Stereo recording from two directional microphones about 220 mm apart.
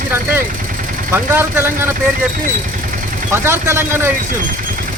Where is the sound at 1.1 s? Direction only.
10° right (ahead or behind).